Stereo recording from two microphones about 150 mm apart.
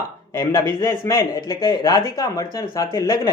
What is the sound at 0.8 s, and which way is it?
Speech, 20° left (ahead or behind).